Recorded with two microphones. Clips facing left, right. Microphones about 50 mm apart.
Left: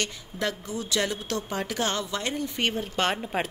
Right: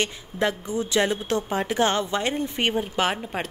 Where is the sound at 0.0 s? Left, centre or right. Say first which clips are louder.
Right 5 dB; right.